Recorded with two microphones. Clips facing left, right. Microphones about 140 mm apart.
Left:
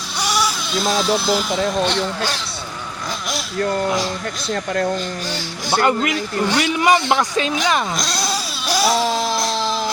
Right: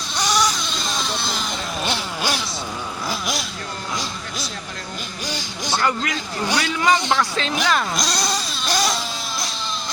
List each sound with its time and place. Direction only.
0.2 s speech: 10° left (ahead or behind)
1.8 s speech: 5° right (ahead or behind)
4.5 s speech: 60° left (ahead or behind)
5.8 s speech: 20° left (ahead or behind)
7.9 s vehicle: centre (ahead or behind)
9.1 s a sound: centre (ahead or behind)